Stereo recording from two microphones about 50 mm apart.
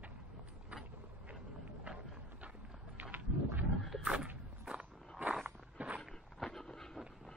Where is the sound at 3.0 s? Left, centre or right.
Right.